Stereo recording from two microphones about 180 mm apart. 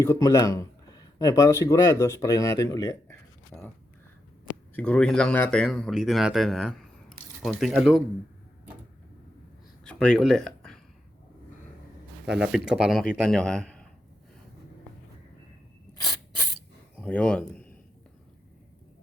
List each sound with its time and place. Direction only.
0.0 s speech: 20° left (ahead or behind)
3.1 s a sound: centre (ahead or behind)
4.7 s speech: 5° left (ahead or behind)
9.8 s speech: 5° left (ahead or behind)
12.2 s speech: centre (ahead or behind)
16.0 s a sound: 20° left (ahead or behind)
17.0 s a man's voice: 5° left (ahead or behind)